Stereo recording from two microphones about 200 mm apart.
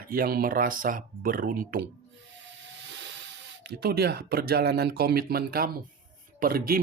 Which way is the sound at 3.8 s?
50° right (ahead or behind).